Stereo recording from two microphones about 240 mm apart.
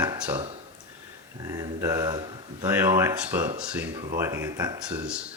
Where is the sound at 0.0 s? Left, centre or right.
Centre.